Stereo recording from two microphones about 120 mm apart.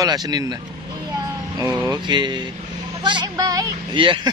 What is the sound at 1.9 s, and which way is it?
A woman's voice, 40° right (ahead or behind).